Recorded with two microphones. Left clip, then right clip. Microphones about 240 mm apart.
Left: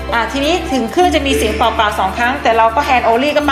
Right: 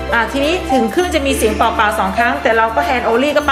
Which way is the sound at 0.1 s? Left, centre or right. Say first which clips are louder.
Even; centre.